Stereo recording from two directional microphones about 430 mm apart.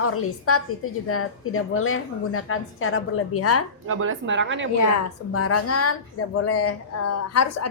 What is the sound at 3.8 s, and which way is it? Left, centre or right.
Speech, right.